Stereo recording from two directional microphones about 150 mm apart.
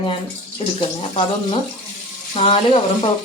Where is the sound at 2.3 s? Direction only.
40° left (ahead or behind).